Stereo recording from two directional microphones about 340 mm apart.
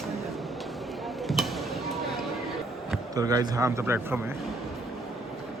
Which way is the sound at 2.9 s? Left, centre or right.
Centre.